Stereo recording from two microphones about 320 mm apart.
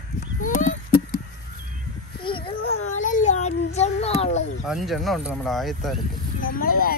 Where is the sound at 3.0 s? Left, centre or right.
Left.